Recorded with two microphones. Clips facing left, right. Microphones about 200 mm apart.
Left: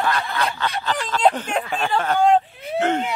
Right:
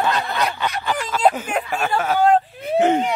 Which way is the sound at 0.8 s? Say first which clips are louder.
Right 1 dB; 10° right (ahead or behind).